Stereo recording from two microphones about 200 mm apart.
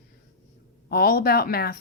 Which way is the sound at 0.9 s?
50° left (ahead or behind).